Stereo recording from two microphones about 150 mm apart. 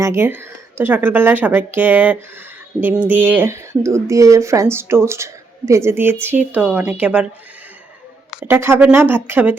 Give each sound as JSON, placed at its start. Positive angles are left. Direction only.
{"t": 0.0, "sound": "speech", "side_deg": -20}
{"t": 8.3, "sound": "speech", "side_deg": -10}